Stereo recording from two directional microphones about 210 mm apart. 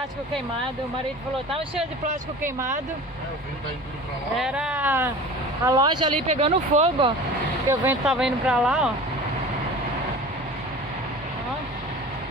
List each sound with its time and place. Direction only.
4.4 s speech: 5° right (ahead or behind)
5.7 s speech: 20° right (ahead or behind)
7.8 s speech: 5° right (ahead or behind)